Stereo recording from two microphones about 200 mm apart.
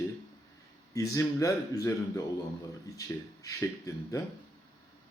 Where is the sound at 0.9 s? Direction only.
15° left (ahead or behind).